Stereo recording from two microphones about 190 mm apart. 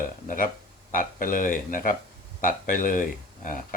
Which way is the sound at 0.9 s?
45° left (ahead or behind).